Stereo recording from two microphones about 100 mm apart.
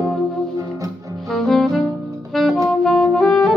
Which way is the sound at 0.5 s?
35° right (ahead or behind).